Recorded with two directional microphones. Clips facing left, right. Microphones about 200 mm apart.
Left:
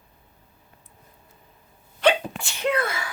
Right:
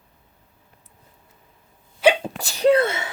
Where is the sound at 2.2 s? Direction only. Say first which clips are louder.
Right 8 dB; 35° right (ahead or behind).